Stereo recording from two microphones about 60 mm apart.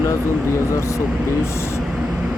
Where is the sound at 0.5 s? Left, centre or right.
Left.